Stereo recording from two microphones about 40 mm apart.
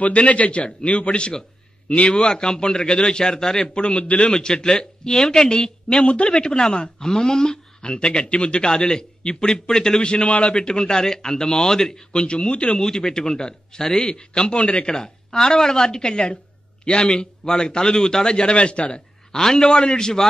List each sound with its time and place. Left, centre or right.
0.0 s a man's voice: left
2.1 s a man's voice: centre
3.6 s a man's voice: left
4.3 s a woman's voice: centre
6.0 s a man's voice: left
6.3 s a man's voice: centre
12.2 s a man's voice: left
12.7 s a woman's voice: centre
15.0 s a woman's voice: centre
19.3 s a woman's voice: centre